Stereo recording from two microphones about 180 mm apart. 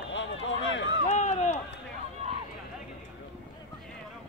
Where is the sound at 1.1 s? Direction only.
40° left (ahead or behind).